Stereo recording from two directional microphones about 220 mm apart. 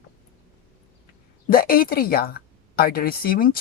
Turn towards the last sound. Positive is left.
turn(degrees=40)  # may be behind; listen again after turning